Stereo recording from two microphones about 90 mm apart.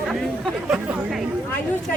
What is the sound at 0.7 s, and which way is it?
Speech, 15° right (ahead or behind).